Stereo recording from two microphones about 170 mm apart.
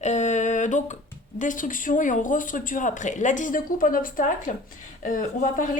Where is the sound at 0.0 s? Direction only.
45° left (ahead or behind).